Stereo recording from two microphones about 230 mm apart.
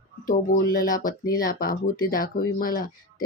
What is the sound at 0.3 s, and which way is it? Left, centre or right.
Speech, left.